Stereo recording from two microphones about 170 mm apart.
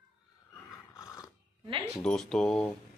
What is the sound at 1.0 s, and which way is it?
Dog, 20° left (ahead or behind).